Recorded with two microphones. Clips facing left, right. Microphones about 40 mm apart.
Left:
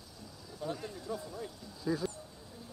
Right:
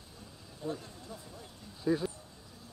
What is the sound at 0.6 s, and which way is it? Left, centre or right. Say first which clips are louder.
Speech: left 1 dB; left.